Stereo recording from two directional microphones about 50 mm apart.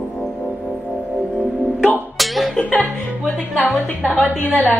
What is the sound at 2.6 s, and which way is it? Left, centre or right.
Music, left.